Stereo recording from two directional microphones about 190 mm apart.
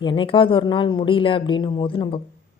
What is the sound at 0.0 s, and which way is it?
Speech, 25° left (ahead or behind).